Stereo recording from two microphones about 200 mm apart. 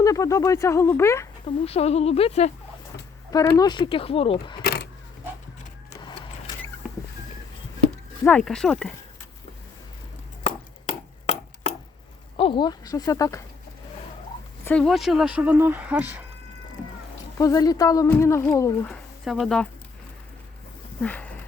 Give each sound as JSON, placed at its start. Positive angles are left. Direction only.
{"t": 0.0, "sound": "speech", "side_deg": 15}
{"t": 1.5, "sound": "speech", "side_deg": 30}
{"t": 3.6, "sound": "speech", "side_deg": 25}
{"t": 4.6, "sound": "keys jangling", "side_deg": 55}
{"t": 5.9, "sound": "a sound", "side_deg": 20}
{"t": 8.2, "sound": "speech", "side_deg": 5}
{"t": 10.4, "sound": "chopping", "side_deg": 30}
{"t": 12.4, "sound": "speech", "side_deg": 25}
{"t": 14.6, "sound": "speech", "side_deg": 5}
{"t": 17.3, "sound": "speech", "side_deg": 15}
{"t": 18.9, "sound": "speech", "side_deg": 0}
{"t": 21.0, "sound": "a sound", "side_deg": 5}